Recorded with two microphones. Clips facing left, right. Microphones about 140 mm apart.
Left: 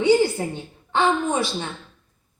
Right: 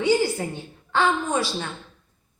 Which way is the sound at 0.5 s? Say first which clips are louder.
Left 1 dB; 20° left (ahead or behind).